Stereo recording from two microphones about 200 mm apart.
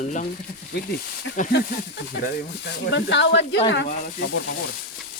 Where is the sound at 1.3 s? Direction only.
40° left (ahead or behind).